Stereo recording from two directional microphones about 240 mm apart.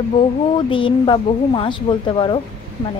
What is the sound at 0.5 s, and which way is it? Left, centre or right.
A woman's voice, left.